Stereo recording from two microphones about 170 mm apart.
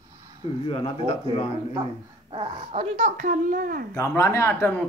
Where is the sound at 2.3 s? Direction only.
35° right (ahead or behind); by 3.8 s 55° right (ahead or behind).